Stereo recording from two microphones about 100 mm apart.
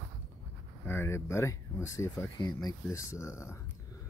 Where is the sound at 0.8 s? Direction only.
25° left (ahead or behind).